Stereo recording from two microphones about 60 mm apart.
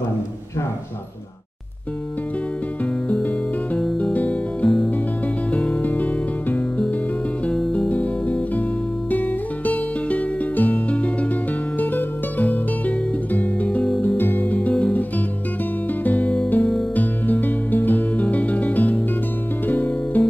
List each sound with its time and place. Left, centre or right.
3.7 s music: left
7.4 s music: centre; by 20.2 s left